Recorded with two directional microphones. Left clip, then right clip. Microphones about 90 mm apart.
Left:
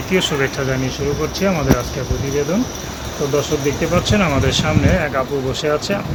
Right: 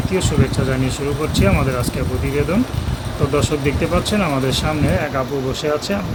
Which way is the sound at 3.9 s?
25° right (ahead or behind).